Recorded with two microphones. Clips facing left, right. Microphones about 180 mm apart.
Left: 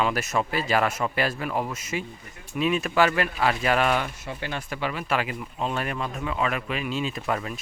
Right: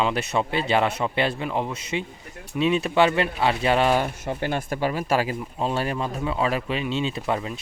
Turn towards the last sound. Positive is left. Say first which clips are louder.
# right 2 dB
turn(degrees=-25)  # may be behind; listen again after turning